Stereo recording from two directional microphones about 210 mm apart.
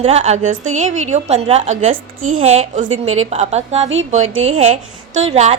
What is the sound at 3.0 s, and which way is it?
Speech, 75° right (ahead or behind).